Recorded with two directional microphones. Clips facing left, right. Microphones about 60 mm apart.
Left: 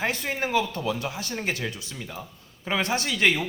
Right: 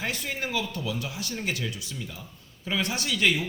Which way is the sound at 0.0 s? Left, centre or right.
Left.